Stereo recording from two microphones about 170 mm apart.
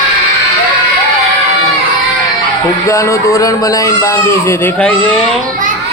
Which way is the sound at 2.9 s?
15° left (ahead or behind).